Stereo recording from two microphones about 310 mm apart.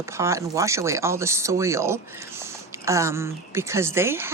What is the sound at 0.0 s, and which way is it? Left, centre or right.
Speech, centre.